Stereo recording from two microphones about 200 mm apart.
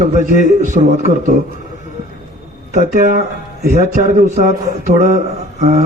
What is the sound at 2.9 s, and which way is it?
A man's voice, 40° right (ahead or behind).